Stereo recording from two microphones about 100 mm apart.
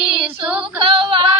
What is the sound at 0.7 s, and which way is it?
Female singing, 60° right (ahead or behind).